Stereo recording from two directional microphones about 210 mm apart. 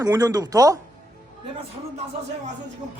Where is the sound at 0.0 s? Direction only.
15° right (ahead or behind).